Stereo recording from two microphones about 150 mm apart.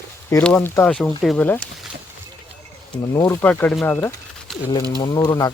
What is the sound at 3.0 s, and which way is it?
Speech, 25° left (ahead or behind).